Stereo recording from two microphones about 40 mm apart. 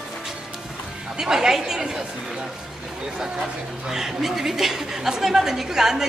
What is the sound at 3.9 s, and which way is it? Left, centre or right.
Speech, centre.